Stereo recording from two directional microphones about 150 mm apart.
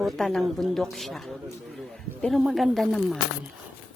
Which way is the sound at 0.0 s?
Centre (ahead or behind).